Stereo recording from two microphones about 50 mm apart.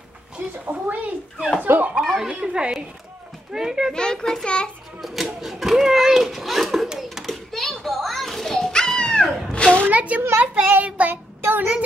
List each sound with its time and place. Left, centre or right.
0.4 s a sound: right
2.1 s speech: centre
3.9 s a child's voice: centre
5.0 s a child's voice: centre
7.2 s children playing: centre; by 9.8 s left
9.8 s child singing: right